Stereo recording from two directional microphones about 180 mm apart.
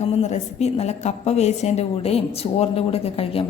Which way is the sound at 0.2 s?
40° left (ahead or behind).